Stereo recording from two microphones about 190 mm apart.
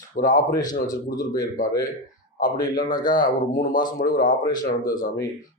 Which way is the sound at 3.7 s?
20° left (ahead or behind).